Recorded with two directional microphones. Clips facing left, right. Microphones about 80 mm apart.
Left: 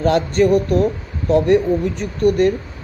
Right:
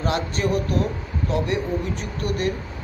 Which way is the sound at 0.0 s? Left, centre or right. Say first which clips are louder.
Left 9 dB; left.